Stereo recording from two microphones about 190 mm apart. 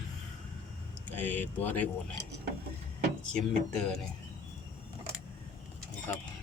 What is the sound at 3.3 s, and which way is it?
Speech, 5° left (ahead or behind).